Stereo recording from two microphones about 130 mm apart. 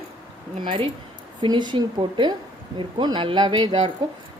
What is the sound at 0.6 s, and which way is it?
A woman's voice, 40° right (ahead or behind).